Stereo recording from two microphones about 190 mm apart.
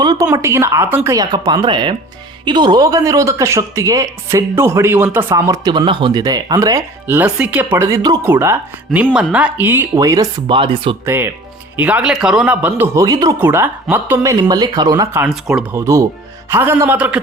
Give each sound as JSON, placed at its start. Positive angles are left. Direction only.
{"t": 0.0, "sound": "a sound", "side_deg": -20}
{"t": 0.3, "sound": "speech", "side_deg": -15}
{"t": 10.4, "sound": "speech", "side_deg": -30}
{"t": 11.0, "sound": "speech", "side_deg": -10}
{"t": 15.3, "sound": "speech", "side_deg": -5}
{"t": 15.7, "sound": "speech", "side_deg": -15}